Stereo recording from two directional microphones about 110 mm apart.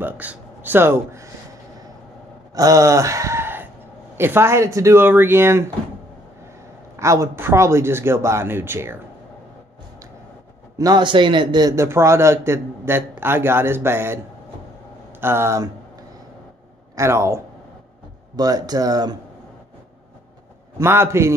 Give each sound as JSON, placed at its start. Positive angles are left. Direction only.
{"t": 0.0, "sound": "speech", "side_deg": -15}
{"t": 2.5, "sound": "a sound", "side_deg": -30}
{"t": 4.2, "sound": "a man's voice", "side_deg": -20}
{"t": 7.0, "sound": "a man's voice", "side_deg": -25}
{"t": 10.8, "sound": "a man's voice", "side_deg": -40}
{"t": 11.7, "sound": "a man's voice", "side_deg": -25}
{"t": 16.9, "sound": "speech", "side_deg": -25}
{"t": 18.3, "sound": "speech", "side_deg": -35}
{"t": 20.7, "sound": "a man's voice", "side_deg": -25}